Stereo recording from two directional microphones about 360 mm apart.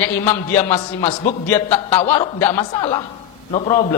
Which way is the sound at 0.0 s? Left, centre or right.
Centre.